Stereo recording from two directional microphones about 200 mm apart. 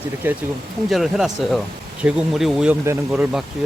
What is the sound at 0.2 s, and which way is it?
Speech, 10° right (ahead or behind).